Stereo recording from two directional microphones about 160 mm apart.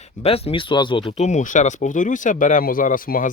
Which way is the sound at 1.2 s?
50° left (ahead or behind).